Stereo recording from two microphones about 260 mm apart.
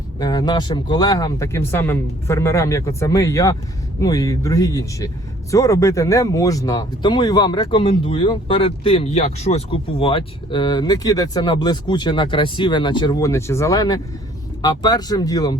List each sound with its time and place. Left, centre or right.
0.2 s speech: centre